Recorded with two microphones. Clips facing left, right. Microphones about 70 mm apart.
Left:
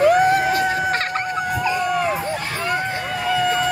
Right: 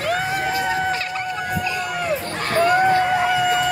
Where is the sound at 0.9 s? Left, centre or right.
Left.